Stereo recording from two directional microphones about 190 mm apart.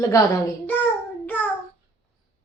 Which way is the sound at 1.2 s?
10° left (ahead or behind).